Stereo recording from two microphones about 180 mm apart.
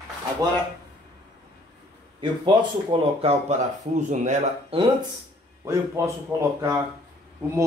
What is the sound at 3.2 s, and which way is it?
Speech, 40° right (ahead or behind).